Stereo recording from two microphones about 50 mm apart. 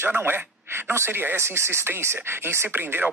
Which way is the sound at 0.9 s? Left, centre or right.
Right.